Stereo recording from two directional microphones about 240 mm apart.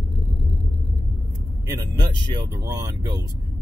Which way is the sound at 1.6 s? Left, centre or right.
Centre.